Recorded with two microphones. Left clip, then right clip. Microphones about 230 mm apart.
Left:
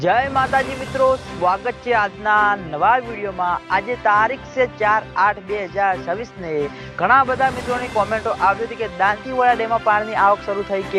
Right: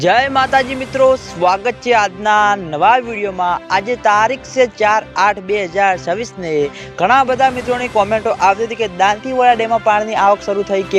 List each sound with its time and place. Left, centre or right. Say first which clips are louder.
0.0 s speech: right 5 dB; right